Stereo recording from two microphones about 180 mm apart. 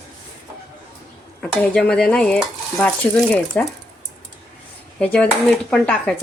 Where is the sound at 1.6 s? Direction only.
5° left (ahead or behind).